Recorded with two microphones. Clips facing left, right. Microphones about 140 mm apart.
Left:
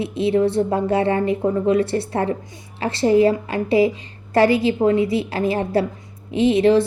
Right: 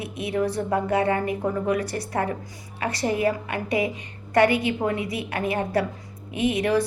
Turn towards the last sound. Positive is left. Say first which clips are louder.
# left 7 dB
turn(degrees=25)  # may be behind; listen again after turning